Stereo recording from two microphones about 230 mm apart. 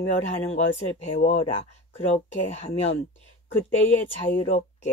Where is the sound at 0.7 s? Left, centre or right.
Left.